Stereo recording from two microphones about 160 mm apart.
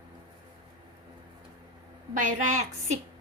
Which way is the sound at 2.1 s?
55° right (ahead or behind).